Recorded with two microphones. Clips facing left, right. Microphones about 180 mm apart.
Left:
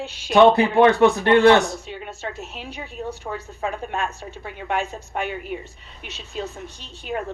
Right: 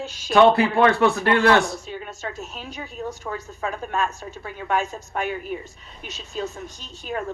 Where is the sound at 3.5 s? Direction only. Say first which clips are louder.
Left 3 dB; 55° left (ahead or behind).